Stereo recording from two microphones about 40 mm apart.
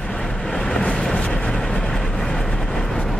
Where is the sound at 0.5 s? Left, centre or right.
Centre.